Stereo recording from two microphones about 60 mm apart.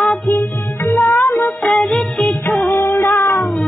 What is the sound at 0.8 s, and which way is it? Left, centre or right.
Music, left.